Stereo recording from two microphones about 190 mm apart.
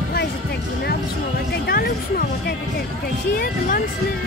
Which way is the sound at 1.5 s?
50° left (ahead or behind).